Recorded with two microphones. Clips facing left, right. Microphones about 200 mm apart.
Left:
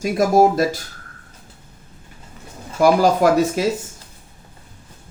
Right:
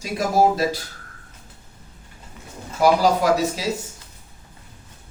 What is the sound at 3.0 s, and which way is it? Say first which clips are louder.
Speech: left 3 dB; 50° left (ahead or behind).